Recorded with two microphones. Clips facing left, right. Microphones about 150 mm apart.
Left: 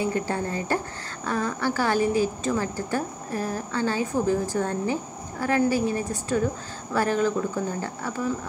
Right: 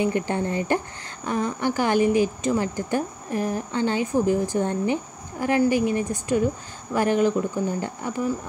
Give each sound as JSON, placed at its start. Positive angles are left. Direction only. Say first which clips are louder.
{"t": 0.0, "sound": "speech", "louder": "right 3 dB", "side_deg": -20}